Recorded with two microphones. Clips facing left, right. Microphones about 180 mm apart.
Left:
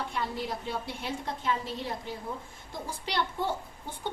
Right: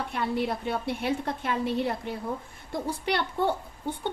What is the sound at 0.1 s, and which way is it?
A woman's voice, 60° right (ahead or behind).